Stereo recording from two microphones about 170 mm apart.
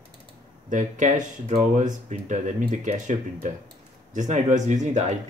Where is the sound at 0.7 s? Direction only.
50° right (ahead or behind).